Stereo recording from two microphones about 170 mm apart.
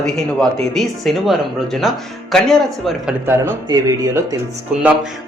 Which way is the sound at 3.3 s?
15° right (ahead or behind).